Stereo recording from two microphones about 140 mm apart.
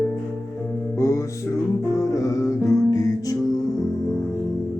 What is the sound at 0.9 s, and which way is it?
Music, 20° left (ahead or behind).